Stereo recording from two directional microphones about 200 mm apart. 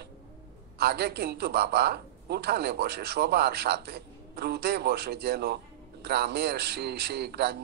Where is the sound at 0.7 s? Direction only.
55° right (ahead or behind).